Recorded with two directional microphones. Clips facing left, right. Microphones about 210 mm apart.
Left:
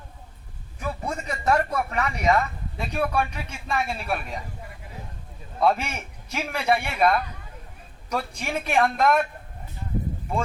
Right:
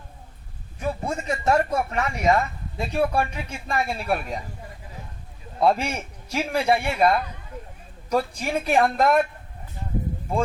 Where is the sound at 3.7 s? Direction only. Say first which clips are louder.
Right 2 dB; 40° right (ahead or behind).